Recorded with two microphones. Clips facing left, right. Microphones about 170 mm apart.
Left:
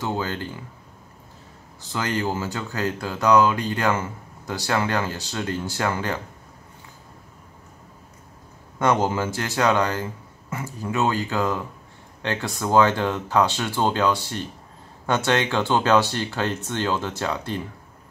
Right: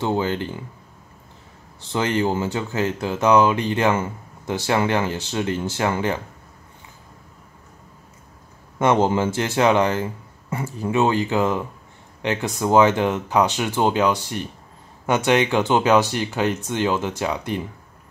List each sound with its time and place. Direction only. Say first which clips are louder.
0.0 s speech: right 5 dB; 20° right (ahead or behind)
1.9 s speech: right 4 dB; 25° right (ahead or behind)
8.7 s speech: right 3 dB; 25° right (ahead or behind)